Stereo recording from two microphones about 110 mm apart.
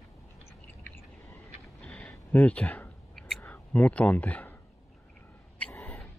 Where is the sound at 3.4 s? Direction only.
15° left (ahead or behind).